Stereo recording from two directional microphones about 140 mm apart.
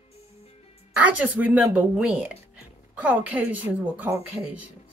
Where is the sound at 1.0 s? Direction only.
10° right (ahead or behind).